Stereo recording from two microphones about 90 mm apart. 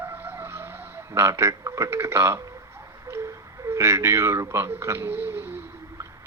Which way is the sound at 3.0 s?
30° right (ahead or behind).